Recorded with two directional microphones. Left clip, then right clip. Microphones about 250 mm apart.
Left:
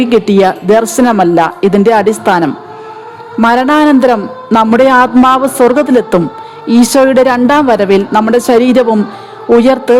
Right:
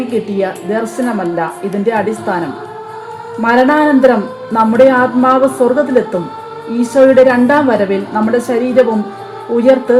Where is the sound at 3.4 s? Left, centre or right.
Left.